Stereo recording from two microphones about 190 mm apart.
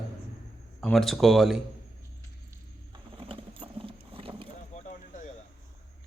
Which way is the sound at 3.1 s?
30° right (ahead or behind).